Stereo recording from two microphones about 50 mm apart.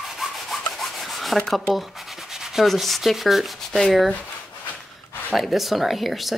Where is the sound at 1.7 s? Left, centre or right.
Centre.